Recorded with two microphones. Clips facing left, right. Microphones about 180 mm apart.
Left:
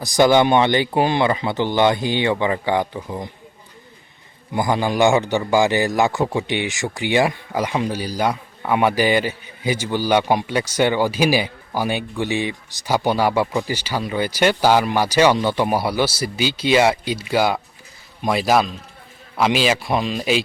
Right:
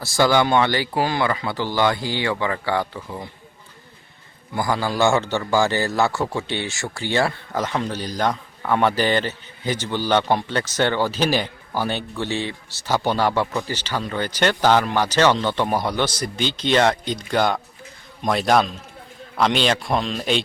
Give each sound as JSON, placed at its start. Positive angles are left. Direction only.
{"t": 0.0, "sound": "speech", "side_deg": 20}
{"t": 4.5, "sound": "a man's voice", "side_deg": 20}